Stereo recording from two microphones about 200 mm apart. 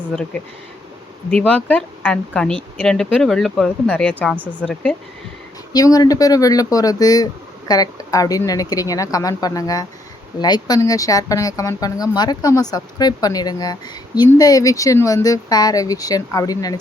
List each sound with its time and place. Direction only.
1.3 s speech: 5° left (ahead or behind)
5.7 s speech: 20° left (ahead or behind)